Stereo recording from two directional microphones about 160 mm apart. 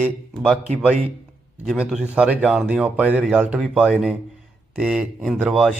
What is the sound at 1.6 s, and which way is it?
A man's voice, 5° right (ahead or behind).